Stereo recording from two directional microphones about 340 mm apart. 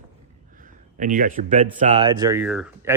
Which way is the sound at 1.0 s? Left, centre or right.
Right.